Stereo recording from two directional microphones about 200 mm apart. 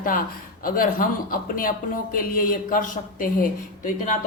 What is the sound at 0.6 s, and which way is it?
A woman's voice, 45° left (ahead or behind).